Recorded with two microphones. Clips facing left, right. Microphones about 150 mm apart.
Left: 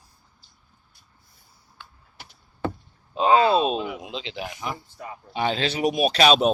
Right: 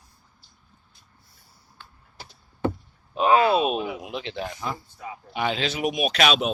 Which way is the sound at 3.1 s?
25° left (ahead or behind).